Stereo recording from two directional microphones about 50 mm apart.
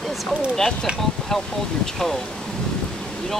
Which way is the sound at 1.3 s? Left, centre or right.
Centre.